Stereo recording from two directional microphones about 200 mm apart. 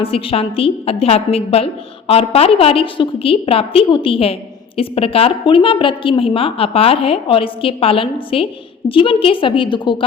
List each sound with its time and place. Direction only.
0.0 s a woman's voice: 30° left (ahead or behind)